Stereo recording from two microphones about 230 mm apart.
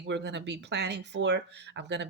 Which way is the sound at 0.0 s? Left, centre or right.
Right.